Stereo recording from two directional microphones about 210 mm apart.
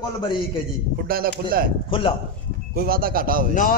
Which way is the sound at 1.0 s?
45° right (ahead or behind).